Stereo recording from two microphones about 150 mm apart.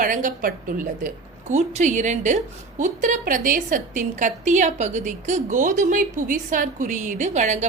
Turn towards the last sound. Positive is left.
turn(degrees=-50)  # may be behind; listen again after turning